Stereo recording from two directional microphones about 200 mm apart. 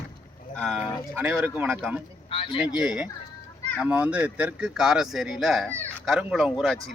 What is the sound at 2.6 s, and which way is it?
Speech, 5° right (ahead or behind).